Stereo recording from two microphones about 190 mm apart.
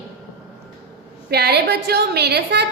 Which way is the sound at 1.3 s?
60° right (ahead or behind).